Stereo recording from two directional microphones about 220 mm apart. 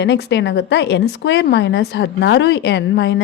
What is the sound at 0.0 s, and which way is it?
A woman's voice, 50° left (ahead or behind).